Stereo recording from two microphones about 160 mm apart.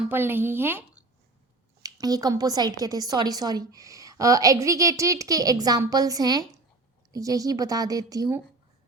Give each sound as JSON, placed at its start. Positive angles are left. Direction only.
{"t": 0.0, "sound": "a woman's voice", "side_deg": -15}
{"t": 1.8, "sound": "a woman's voice", "side_deg": -25}